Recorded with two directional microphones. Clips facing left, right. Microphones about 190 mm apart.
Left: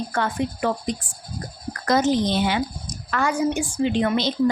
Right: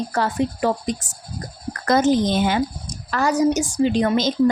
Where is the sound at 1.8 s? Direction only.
50° right (ahead or behind).